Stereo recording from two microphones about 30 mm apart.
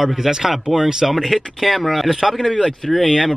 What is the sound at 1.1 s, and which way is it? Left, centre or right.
Speech, centre.